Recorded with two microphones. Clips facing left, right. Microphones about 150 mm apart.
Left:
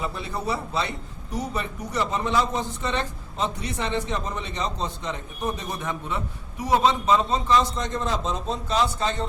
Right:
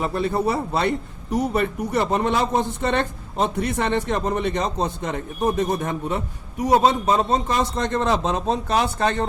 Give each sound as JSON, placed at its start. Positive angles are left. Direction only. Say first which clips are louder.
{"t": 0.0, "sound": "a man's voice", "louder": "right 8 dB", "side_deg": -60}